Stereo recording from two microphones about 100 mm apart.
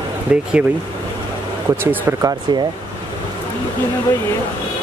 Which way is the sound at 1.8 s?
20° right (ahead or behind).